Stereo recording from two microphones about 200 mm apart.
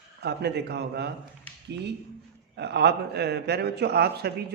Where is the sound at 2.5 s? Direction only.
55° right (ahead or behind).